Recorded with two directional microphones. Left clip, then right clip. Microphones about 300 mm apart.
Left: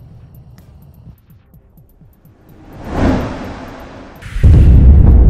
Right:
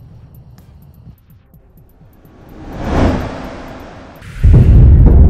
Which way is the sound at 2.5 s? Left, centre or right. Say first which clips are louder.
Right 8 dB; right.